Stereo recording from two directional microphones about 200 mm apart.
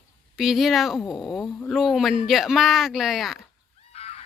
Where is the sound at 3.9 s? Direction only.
30° left (ahead or behind).